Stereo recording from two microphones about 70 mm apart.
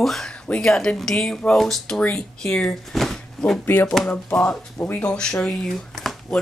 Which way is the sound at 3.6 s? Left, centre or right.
Left.